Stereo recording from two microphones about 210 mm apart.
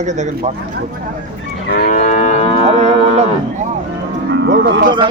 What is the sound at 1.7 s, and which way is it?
Moo, 40° left (ahead or behind).